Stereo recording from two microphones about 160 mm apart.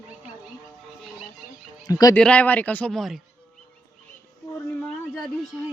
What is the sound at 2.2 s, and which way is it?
Speech, 10° left (ahead or behind).